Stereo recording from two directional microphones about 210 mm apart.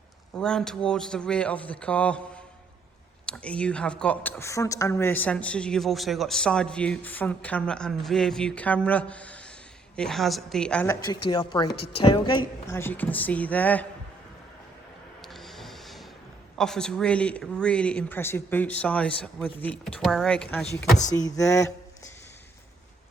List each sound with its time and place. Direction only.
0.3 s a woman's voice: 5° left (ahead or behind)
11.1 s speech: 20° left (ahead or behind)
12.7 s speech: 10° left (ahead or behind)
15.2 s a sound: centre (ahead or behind)
16.6 s a woman's voice: 5° left (ahead or behind)
21.1 s speech: 15° left (ahead or behind)